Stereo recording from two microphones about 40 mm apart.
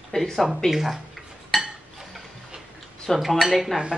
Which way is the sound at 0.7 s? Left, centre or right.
Centre.